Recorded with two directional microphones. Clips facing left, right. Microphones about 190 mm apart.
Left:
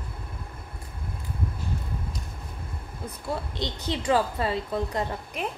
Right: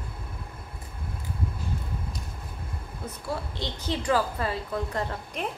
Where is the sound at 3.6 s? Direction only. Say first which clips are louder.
Left 1 dB; 20° left (ahead or behind).